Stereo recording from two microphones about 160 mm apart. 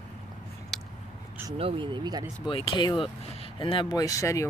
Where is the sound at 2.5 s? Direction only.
35° left (ahead or behind).